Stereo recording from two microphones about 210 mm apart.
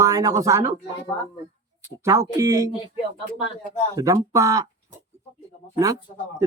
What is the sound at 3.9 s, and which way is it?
Speech, 15° right (ahead or behind).